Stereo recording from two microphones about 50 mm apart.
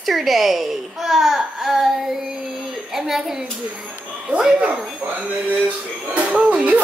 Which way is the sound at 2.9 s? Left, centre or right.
Centre.